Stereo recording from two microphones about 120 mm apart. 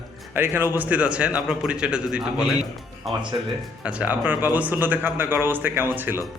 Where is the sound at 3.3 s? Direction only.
40° right (ahead or behind).